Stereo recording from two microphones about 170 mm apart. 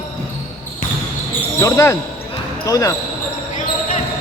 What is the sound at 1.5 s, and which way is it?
Speech, 15° left (ahead or behind).